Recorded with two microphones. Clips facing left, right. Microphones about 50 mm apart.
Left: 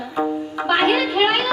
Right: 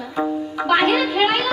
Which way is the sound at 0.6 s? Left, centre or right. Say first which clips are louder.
Right 1 dB; left.